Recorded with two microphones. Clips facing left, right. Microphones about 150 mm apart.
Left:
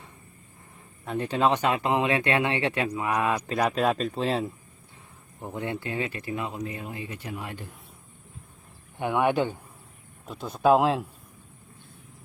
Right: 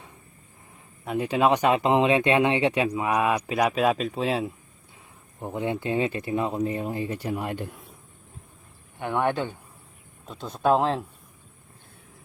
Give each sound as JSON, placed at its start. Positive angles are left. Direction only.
{"t": 1.0, "sound": "speech", "side_deg": -10}
{"t": 5.4, "sound": "speech", "side_deg": -20}
{"t": 9.0, "sound": "speech", "side_deg": 10}